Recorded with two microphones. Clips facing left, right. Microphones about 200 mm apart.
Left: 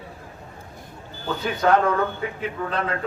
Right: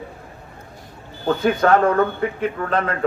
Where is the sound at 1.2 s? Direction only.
50° right (ahead or behind).